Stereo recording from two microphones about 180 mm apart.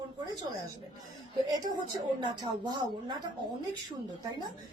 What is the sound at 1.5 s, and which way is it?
Speech, 25° right (ahead or behind).